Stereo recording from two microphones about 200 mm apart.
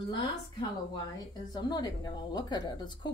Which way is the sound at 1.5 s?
20° left (ahead or behind).